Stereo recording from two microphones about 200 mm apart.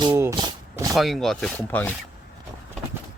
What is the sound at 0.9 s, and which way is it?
Speech, centre (ahead or behind).